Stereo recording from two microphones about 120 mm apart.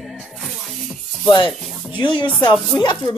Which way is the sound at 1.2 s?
40° left (ahead or behind).